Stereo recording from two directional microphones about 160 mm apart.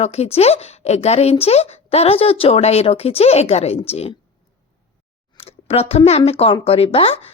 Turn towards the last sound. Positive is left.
turn(degrees=40)  # may be behind; listen again after turning